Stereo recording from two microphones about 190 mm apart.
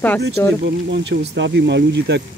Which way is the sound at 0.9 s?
65° right (ahead or behind).